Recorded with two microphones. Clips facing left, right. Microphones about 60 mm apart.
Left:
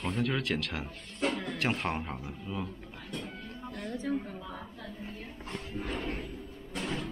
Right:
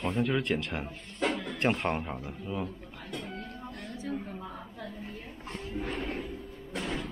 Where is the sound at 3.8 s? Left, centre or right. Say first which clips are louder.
Left 4 dB; left.